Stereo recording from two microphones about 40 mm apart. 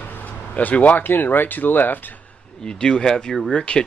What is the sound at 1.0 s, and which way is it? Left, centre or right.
Speech, left.